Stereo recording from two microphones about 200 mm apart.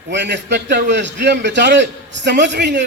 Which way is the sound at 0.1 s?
60° right (ahead or behind).